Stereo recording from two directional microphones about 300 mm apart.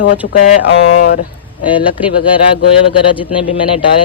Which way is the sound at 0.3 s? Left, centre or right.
Left.